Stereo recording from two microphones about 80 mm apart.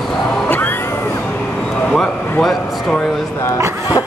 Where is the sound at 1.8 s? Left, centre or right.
Centre.